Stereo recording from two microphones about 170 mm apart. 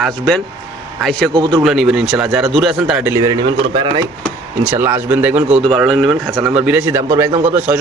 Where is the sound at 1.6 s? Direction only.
Centre (ahead or behind).